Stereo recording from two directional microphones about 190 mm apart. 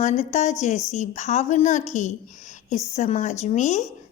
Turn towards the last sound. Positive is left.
turn(degrees=40)  # may be behind; listen again after turning